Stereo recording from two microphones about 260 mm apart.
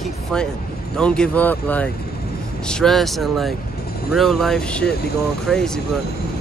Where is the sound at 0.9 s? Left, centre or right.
Centre.